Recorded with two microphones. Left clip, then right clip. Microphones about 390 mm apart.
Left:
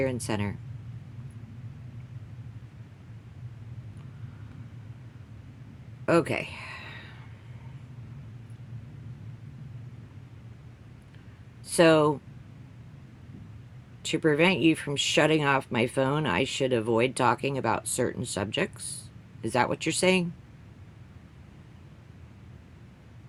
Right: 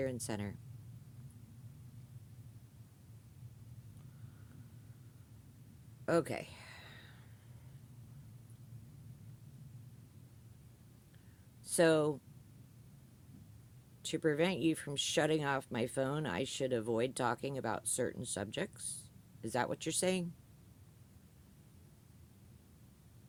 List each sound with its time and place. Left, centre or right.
0.0 s speech: right
6.1 s a sound: right
11.6 s speech: right
14.0 s speech: right